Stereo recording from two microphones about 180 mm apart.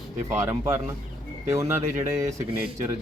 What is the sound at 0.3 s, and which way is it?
Speech, 15° right (ahead or behind).